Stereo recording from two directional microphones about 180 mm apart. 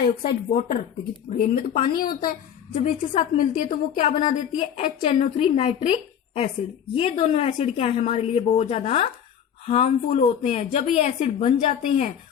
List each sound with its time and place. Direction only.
0.2 s a woman's voice: 50° left (ahead or behind)
2.7 s a woman's voice: 40° left (ahead or behind)